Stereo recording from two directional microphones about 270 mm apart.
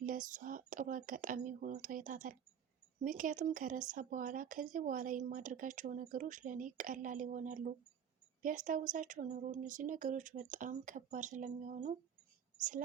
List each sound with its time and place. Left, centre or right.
0.0 s speech: right